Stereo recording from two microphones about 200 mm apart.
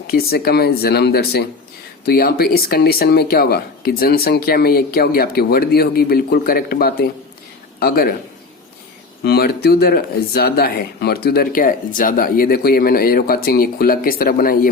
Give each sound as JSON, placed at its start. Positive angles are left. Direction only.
{"t": 0.1, "sound": "speech", "side_deg": 50}
{"t": 9.2, "sound": "speech", "side_deg": 55}